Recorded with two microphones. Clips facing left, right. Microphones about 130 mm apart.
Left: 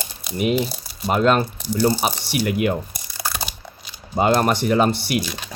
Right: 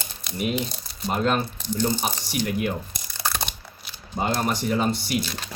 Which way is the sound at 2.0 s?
80° left.